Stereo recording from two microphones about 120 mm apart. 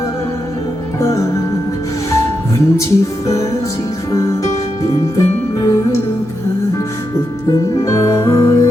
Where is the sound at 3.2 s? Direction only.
25° left (ahead or behind).